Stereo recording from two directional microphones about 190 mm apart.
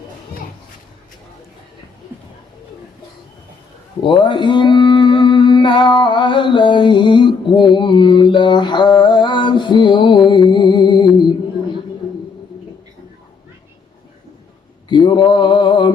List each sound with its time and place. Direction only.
4.0 s mantra: 25° left (ahead or behind)
14.8 s mantra: 25° left (ahead or behind)